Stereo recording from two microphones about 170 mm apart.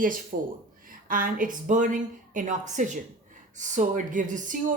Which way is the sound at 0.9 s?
55° right (ahead or behind).